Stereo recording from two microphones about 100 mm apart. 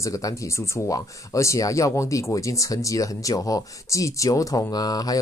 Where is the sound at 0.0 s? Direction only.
30° left (ahead or behind).